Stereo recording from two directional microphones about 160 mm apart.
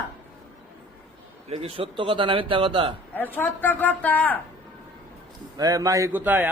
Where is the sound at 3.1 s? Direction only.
10° left (ahead or behind).